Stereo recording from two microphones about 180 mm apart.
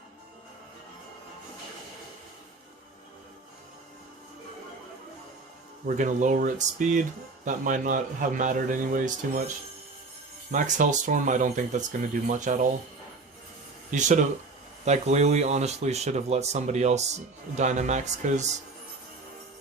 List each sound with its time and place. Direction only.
5.8 s speech: 45° right (ahead or behind)
10.5 s speech: 45° right (ahead or behind)
13.9 s speech: 45° right (ahead or behind)